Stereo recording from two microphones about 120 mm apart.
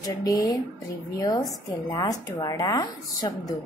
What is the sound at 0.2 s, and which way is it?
A woman's voice, 30° left (ahead or behind).